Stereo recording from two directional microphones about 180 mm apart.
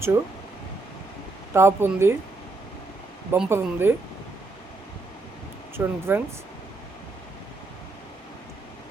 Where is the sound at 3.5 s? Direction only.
15° right (ahead or behind).